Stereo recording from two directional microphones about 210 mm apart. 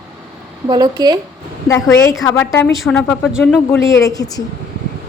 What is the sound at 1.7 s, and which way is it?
A woman's voice, 15° left (ahead or behind).